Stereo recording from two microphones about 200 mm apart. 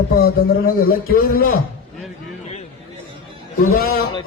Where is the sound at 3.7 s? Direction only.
50° left (ahead or behind).